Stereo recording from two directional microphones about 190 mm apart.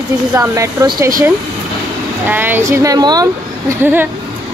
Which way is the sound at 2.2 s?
10° right (ahead or behind).